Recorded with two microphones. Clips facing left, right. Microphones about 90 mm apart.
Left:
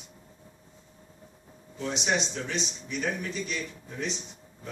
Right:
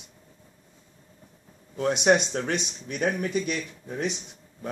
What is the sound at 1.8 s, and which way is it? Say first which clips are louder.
Speech: right 8 dB; 55° right (ahead or behind).